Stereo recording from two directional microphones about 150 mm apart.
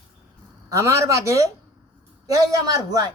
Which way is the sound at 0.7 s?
20° right (ahead or behind).